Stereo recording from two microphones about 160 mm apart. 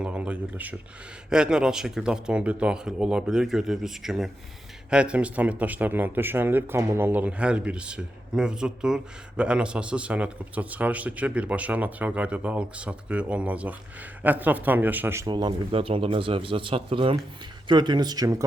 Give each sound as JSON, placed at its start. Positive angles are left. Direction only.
{"t": 0.0, "sound": "a man's voice", "side_deg": -5}
{"t": 15.3, "sound": "speech", "side_deg": -30}